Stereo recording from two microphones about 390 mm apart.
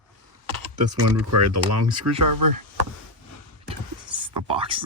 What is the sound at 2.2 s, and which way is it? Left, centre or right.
Speech, right.